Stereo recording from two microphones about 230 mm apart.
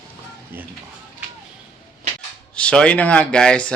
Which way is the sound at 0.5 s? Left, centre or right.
Centre.